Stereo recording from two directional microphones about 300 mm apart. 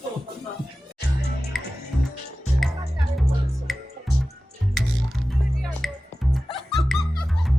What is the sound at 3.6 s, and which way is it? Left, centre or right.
Music, centre.